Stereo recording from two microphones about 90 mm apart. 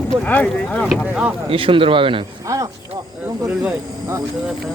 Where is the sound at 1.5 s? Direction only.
80° right.